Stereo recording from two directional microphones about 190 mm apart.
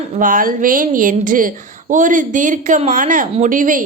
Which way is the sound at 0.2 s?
45° right (ahead or behind).